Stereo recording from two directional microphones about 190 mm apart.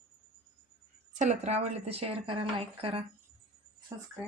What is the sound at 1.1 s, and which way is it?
A woman's voice, 40° right (ahead or behind).